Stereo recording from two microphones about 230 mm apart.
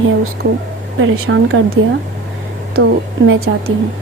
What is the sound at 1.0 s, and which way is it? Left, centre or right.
Speech, right.